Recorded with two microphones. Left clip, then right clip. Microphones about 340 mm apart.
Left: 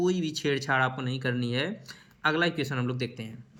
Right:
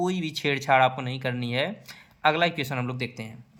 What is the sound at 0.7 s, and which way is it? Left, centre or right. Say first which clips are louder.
Speech: right 9 dB; right.